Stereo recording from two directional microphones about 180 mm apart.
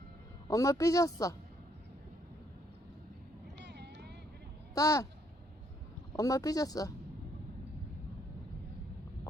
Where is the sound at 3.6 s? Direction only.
70° right (ahead or behind).